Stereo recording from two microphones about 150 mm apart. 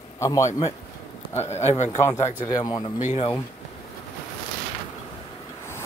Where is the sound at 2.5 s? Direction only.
25° left (ahead or behind).